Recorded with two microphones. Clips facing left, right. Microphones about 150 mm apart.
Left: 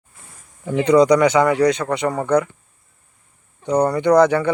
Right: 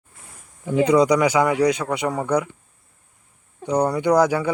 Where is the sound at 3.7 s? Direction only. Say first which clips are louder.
Left 3 dB; 10° right (ahead or behind).